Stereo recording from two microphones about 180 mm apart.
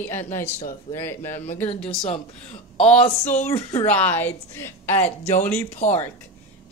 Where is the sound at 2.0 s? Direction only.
35° left (ahead or behind).